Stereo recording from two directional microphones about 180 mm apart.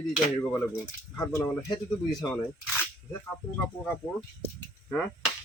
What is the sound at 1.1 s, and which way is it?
Speech, 15° left (ahead or behind).